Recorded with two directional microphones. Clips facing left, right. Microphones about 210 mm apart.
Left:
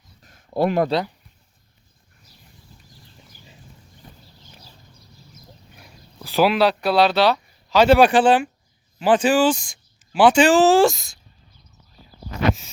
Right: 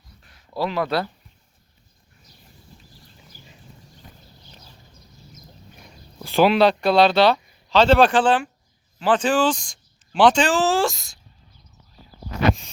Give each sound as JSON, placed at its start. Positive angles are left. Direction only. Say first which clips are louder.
{"t": 0.2, "sound": "a sound", "louder": "left 5 dB", "side_deg": 45}
{"t": 0.9, "sound": "speech", "louder": "left 2 dB", "side_deg": 20}
{"t": 5.7, "sound": "speech", "louder": "right 3 dB", "side_deg": 0}